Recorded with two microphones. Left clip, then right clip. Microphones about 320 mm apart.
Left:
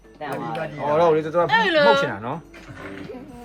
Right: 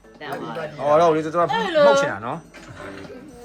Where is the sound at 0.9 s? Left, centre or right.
Centre.